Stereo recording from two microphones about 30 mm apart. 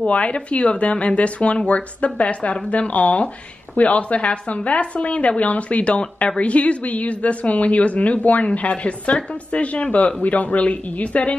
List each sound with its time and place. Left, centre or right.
0.0 s a woman's voice: left
10.2 s a woman's voice: left